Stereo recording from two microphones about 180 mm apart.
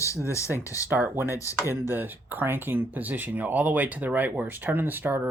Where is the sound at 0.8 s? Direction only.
10° right (ahead or behind).